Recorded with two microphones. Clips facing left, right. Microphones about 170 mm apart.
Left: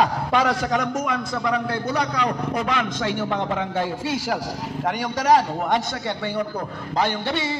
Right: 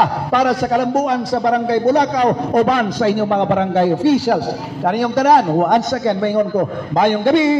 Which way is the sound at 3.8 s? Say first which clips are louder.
Right 12 dB; 30° right (ahead or behind).